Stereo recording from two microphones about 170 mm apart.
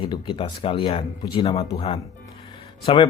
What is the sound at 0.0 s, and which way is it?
Speech, 30° left (ahead or behind).